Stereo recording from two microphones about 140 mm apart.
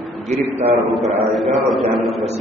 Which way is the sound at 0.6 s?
15° right (ahead or behind).